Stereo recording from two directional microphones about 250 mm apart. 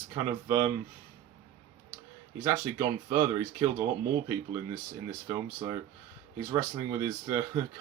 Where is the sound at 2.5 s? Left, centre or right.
Centre.